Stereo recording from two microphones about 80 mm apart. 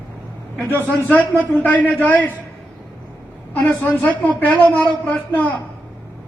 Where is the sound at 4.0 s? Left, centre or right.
Centre.